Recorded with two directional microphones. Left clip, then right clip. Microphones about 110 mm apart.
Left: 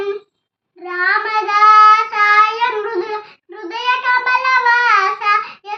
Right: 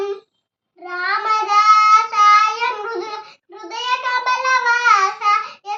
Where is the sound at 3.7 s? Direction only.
15° right (ahead or behind).